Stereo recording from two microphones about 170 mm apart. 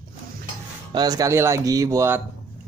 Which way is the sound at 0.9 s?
20° right (ahead or behind).